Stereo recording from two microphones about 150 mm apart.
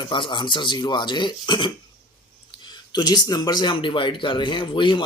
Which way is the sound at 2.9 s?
30° left (ahead or behind).